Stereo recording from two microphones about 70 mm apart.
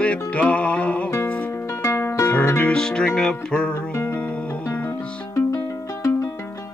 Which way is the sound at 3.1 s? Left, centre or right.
Centre.